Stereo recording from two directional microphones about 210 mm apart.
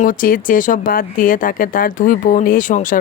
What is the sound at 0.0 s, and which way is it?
Speech, 40° left (ahead or behind).